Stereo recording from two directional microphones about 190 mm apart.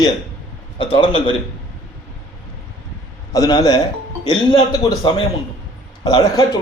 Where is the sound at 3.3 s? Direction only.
20° left (ahead or behind).